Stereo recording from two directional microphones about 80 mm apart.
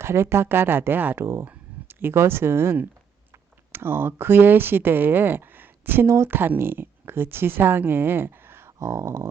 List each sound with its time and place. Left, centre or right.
0.0 s speech: right